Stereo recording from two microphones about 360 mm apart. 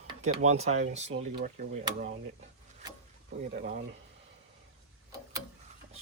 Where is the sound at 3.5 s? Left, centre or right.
Right.